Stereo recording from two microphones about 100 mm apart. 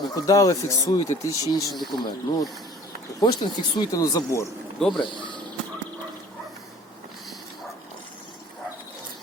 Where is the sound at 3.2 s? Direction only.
40° left (ahead or behind).